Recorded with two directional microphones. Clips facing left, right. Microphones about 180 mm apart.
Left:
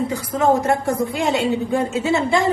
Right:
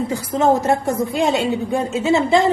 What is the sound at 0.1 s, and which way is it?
A woman's voice, 25° right (ahead or behind).